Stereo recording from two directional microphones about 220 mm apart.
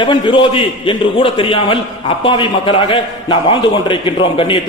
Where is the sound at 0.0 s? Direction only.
20° left (ahead or behind).